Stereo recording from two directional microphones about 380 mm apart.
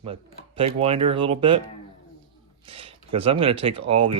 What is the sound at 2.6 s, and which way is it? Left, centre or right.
Speech, centre.